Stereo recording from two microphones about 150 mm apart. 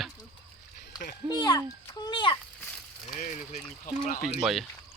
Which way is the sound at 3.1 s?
60° left (ahead or behind).